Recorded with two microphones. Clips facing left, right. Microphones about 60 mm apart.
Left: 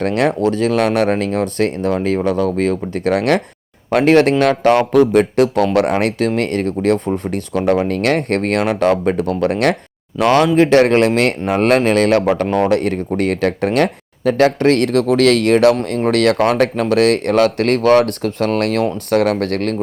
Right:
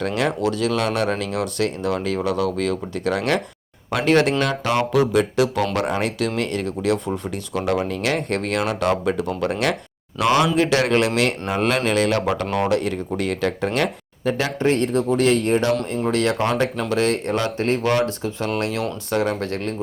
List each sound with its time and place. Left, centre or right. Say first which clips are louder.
0.0 s speech: left 6 dB; left
15.9 s speech: left 6 dB; left